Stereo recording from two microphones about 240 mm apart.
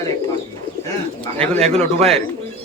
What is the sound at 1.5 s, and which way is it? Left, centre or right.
Speech, right.